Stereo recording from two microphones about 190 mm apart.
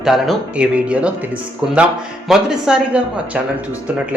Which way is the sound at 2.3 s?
Centre (ahead or behind).